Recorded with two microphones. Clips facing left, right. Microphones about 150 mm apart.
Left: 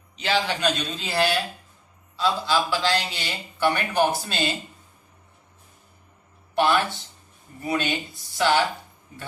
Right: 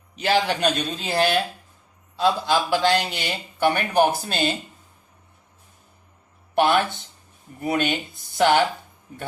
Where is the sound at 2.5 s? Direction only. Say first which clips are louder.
Right 3 dB; 55° right (ahead or behind).